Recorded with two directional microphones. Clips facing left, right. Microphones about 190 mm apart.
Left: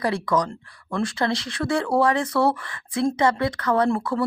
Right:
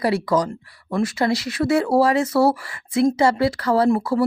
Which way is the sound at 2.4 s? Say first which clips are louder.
Right 3 dB; 10° right (ahead or behind).